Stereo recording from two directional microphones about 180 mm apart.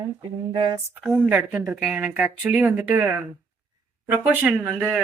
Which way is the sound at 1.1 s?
10° right (ahead or behind).